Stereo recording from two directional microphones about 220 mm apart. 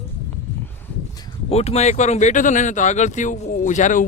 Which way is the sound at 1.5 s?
30° left (ahead or behind).